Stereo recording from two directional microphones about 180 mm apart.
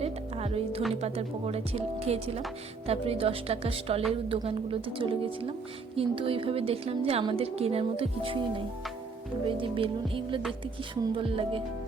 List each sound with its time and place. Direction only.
0.0 s music: 35° right (ahead or behind)
1.0 s a woman's voice: 35° right (ahead or behind)
9.5 s music: 30° right (ahead or behind)